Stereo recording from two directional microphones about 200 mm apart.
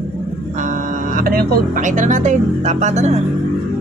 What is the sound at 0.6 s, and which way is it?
Speech, 40° right (ahead or behind).